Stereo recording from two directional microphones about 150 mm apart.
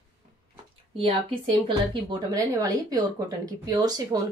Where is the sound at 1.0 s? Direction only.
40° right (ahead or behind).